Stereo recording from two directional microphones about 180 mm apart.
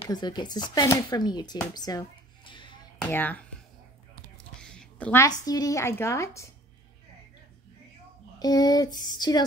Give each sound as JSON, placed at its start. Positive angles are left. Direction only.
{"t": 0.0, "sound": "speech", "side_deg": 25}
{"t": 3.1, "sound": "speech", "side_deg": 10}
{"t": 4.6, "sound": "a woman's voice", "side_deg": 5}
{"t": 8.4, "sound": "a sound", "side_deg": 20}